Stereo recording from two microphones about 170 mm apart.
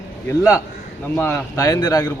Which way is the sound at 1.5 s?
20° left (ahead or behind).